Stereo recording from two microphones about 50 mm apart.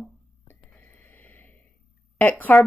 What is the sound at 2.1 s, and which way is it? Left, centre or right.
Speech, left.